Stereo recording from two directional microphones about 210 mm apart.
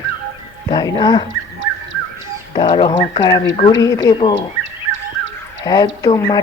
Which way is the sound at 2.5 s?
25° left (ahead or behind).